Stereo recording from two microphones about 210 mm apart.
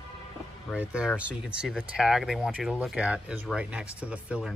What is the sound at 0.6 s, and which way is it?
Speech, 5° right (ahead or behind).